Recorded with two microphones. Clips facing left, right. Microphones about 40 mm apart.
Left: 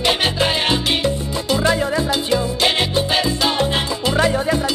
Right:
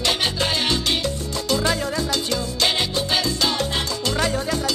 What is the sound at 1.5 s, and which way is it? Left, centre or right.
Music, left.